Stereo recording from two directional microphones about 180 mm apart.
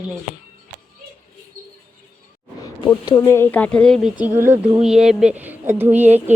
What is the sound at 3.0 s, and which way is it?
A woman's voice, 15° left (ahead or behind).